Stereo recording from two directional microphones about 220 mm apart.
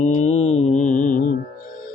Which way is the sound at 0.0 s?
30° left (ahead or behind).